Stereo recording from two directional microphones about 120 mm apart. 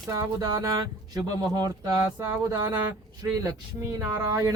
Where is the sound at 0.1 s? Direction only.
30° right (ahead or behind).